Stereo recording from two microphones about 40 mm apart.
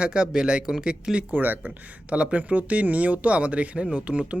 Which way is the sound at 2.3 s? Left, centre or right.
Right.